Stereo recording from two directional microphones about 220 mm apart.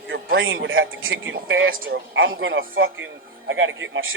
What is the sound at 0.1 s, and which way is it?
Speech, 60° right (ahead or behind).